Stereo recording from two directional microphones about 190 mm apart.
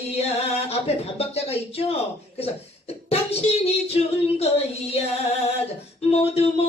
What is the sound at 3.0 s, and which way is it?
Child singing, 30° left (ahead or behind).